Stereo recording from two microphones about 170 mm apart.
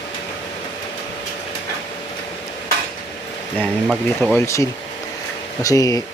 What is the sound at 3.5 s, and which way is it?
Speech, 10° right (ahead or behind).